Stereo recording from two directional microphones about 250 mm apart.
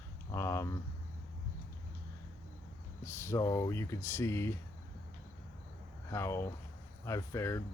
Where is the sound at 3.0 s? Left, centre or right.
Centre.